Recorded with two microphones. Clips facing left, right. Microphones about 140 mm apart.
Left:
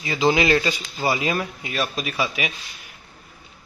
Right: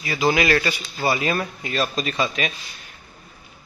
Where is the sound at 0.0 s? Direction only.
20° left (ahead or behind).